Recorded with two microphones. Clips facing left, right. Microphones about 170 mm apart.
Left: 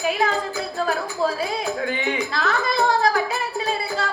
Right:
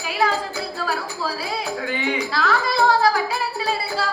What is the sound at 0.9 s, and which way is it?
A woman's voice, 50° left (ahead or behind).